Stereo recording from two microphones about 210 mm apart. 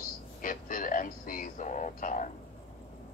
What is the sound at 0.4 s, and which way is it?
Speech, 40° left (ahead or behind).